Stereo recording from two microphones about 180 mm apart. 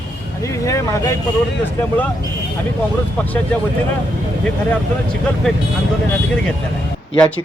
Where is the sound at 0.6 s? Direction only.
15° left (ahead or behind).